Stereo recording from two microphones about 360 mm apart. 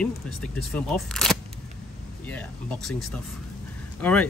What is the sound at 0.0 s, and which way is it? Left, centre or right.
Speech, centre.